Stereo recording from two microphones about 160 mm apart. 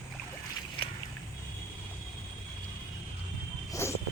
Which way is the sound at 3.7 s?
20° left (ahead or behind).